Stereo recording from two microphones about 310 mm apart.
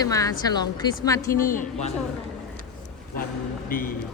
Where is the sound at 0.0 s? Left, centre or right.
Centre.